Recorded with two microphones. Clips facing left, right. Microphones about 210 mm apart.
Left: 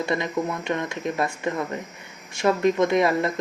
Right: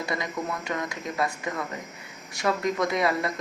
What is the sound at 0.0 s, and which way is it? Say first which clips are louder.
Speech: left 6 dB; 25° left (ahead or behind).